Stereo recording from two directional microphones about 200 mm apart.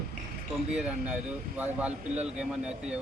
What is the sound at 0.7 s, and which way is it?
Speech, 5° right (ahead or behind).